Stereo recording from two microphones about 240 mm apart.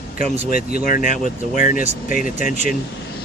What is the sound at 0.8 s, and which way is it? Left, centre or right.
Speech, left.